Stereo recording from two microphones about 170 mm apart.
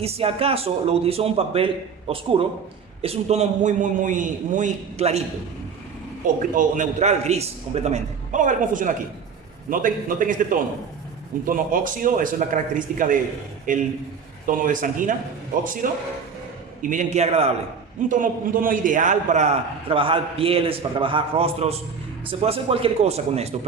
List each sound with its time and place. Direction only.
0.0 s a man's voice: 35° right (ahead or behind)
6.5 s a man's voice: 50° right (ahead or behind)
16.9 s a man's voice: 45° right (ahead or behind)
18.1 s a man's voice: 55° right (ahead or behind); by 23.6 s 35° right (ahead or behind)